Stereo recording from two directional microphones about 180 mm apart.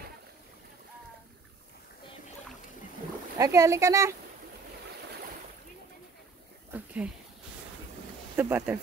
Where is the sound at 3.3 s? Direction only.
20° right (ahead or behind).